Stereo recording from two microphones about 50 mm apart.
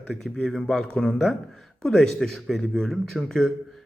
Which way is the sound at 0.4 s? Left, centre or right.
Centre.